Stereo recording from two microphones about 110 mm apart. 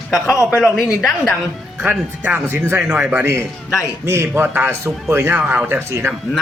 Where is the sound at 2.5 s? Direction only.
25° right (ahead or behind).